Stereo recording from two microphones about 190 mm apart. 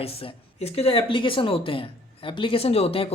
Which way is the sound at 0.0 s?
30° left (ahead or behind).